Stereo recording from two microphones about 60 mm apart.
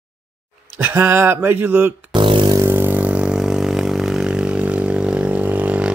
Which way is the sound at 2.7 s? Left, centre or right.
Right.